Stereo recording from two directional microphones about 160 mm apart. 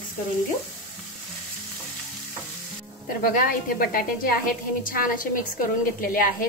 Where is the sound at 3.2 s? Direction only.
60° left (ahead or behind).